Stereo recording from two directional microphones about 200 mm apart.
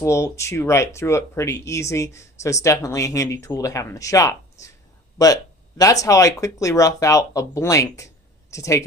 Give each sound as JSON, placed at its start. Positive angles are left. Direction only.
{"t": 0.0, "sound": "speech", "side_deg": 15}